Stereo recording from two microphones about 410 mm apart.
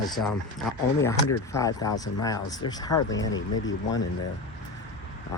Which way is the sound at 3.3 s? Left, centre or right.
Left.